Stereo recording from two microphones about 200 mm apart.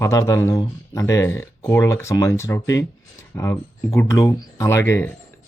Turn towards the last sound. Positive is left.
turn(degrees=10)  # may be behind; listen again after turning